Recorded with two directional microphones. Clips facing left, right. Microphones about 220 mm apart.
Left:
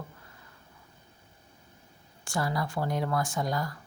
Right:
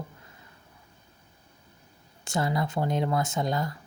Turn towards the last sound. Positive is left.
turn(degrees=-25)  # may be behind; listen again after turning